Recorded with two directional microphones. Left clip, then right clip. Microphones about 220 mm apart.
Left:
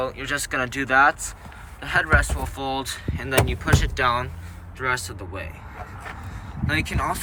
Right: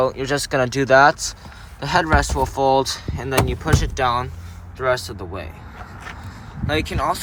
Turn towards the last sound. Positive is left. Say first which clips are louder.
# right 4 dB
turn(degrees=-10)  # may be behind; listen again after turning